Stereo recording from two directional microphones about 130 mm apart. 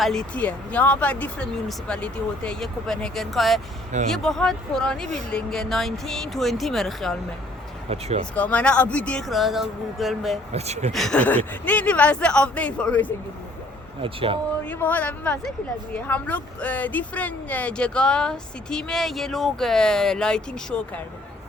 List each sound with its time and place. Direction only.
0.0 s speech: 5° left (ahead or behind)
7.9 s speech: 50° right (ahead or behind)
8.4 s speech: 10° left (ahead or behind)
10.5 s speech: 55° right (ahead or behind)
10.9 s speech: 5° left (ahead or behind)
14.0 s speech: 45° right (ahead or behind)
14.7 s speech: 15° left (ahead or behind)